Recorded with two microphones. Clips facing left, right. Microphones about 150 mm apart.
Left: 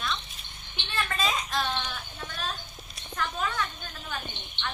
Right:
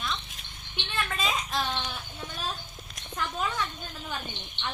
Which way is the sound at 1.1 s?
10° right (ahead or behind).